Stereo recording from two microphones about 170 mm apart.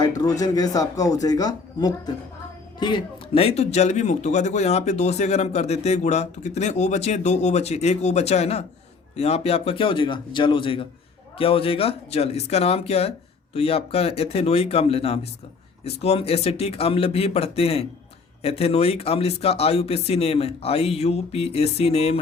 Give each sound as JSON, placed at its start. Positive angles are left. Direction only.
{"t": 0.2, "sound": "speech", "side_deg": 20}